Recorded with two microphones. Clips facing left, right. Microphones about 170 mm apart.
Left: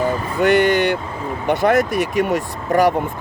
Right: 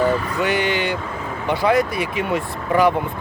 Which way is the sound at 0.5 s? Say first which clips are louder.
Left 6 dB; 55° left (ahead or behind).